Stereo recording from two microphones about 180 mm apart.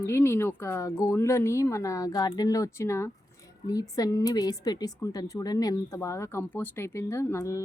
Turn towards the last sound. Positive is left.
turn(degrees=15)  # may be behind; listen again after turning